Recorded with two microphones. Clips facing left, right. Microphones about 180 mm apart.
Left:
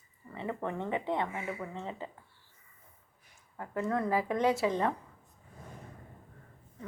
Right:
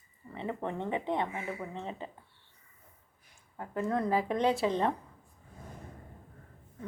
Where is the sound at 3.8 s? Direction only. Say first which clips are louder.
Right 1 dB; 20° right (ahead or behind).